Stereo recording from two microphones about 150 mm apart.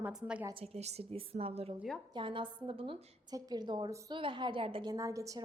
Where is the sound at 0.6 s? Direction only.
45° right (ahead or behind).